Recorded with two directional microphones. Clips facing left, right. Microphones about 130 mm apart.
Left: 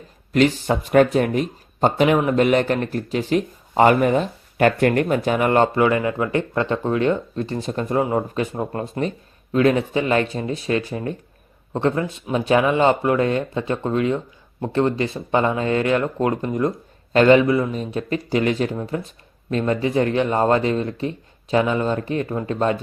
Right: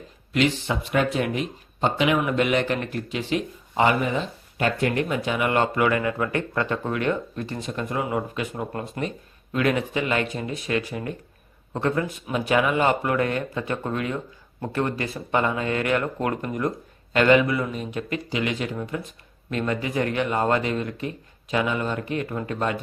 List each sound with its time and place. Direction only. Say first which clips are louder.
0.3 s speech: left 5 dB; 40° left (ahead or behind)
18.7 s speech: left 4 dB; 25° left (ahead or behind)